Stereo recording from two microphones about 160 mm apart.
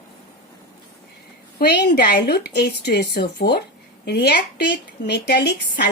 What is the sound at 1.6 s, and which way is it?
A woman's voice, 75° left (ahead or behind).